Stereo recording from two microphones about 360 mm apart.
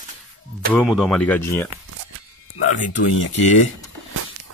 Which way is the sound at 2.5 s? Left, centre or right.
Left.